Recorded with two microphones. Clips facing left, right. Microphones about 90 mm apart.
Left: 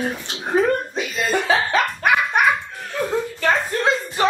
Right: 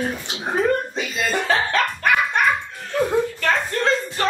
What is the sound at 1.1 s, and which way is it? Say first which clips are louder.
Music: left 1 dB; 5° left (ahead or behind).